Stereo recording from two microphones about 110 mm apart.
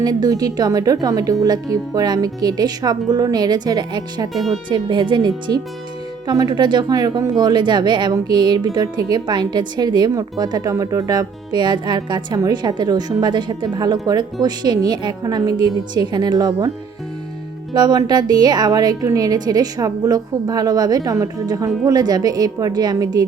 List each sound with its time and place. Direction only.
0.0 s speech: 40° right (ahead or behind)
17.7 s speech: 40° right (ahead or behind)